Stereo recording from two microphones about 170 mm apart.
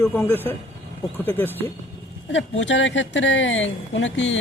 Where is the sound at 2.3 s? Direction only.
90° left.